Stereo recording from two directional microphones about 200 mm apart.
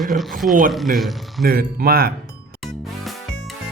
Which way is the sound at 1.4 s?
50° right (ahead or behind).